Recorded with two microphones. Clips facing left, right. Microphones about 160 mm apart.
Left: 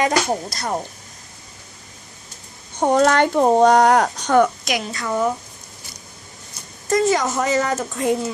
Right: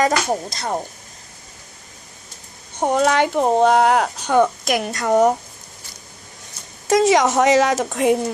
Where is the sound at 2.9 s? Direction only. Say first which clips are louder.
Left 1 dB; 5° right (ahead or behind).